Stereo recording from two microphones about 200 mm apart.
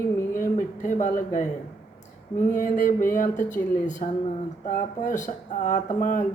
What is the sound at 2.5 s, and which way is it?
A man's voice, 40° left (ahead or behind).